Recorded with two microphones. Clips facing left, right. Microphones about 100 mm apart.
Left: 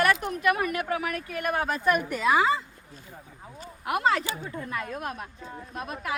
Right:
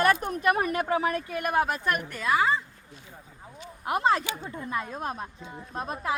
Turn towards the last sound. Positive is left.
turn(degrees=-25)  # may be behind; listen again after turning